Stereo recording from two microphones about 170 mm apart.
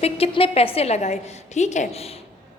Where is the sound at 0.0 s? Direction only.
35° left (ahead or behind).